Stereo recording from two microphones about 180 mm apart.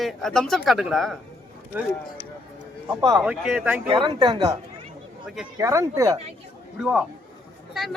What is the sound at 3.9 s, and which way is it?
Speech, 25° right (ahead or behind).